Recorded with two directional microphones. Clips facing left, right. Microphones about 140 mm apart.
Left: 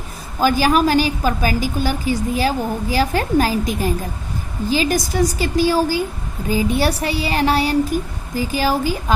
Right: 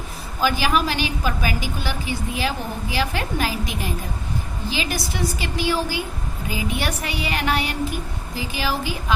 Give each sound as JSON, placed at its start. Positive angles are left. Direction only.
{"t": 0.4, "sound": "a woman's voice", "side_deg": 40}